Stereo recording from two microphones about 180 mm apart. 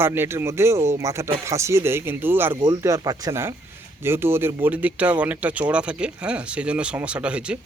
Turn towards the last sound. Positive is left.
turn(degrees=-5)  # may be behind; listen again after turning